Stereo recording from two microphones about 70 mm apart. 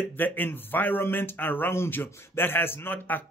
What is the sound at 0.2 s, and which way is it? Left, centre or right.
A man's voice, left.